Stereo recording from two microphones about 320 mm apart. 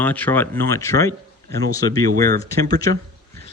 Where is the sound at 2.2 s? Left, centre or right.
Right.